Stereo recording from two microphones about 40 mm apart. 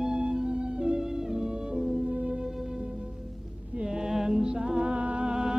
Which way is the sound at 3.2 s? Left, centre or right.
Centre.